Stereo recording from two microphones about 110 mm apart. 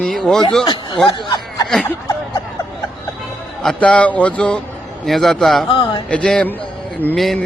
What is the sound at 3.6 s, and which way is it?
A man's voice, 5° left (ahead or behind).